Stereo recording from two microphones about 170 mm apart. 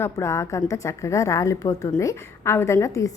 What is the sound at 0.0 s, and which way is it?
A woman's voice, 15° left (ahead or behind).